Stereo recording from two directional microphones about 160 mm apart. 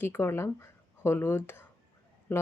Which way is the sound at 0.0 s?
15° left (ahead or behind).